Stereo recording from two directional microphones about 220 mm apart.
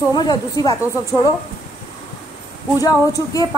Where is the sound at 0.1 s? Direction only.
20° left (ahead or behind).